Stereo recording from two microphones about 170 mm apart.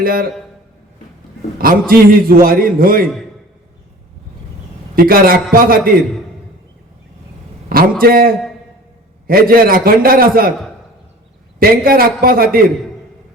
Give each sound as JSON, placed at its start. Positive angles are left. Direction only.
{"t": 0.0, "sound": "a man's voice", "side_deg": -60}
{"t": 1.5, "sound": "a man's voice", "side_deg": -60}
{"t": 4.9, "sound": "a man's voice", "side_deg": -60}
{"t": 8.0, "sound": "a man's voice", "side_deg": -60}
{"t": 11.6, "sound": "a man's voice", "side_deg": -60}